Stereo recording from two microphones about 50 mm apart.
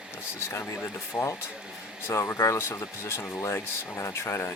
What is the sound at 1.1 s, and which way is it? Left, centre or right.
Speech, left.